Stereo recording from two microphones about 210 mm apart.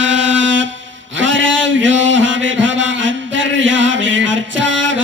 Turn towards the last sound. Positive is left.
turn(degrees=-65)  # may be behind; listen again after turning